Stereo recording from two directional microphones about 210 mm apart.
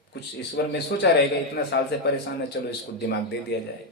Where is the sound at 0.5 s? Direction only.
55° left (ahead or behind).